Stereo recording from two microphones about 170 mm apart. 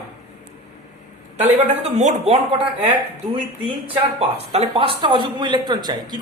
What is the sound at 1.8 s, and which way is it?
Speech, 40° right (ahead or behind).